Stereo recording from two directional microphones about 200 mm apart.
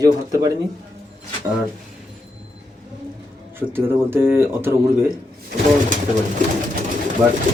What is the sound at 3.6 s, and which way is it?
Speech, 10° right (ahead or behind).